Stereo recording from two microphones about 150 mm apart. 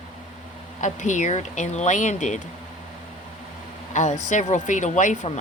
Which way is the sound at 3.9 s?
55° left (ahead or behind).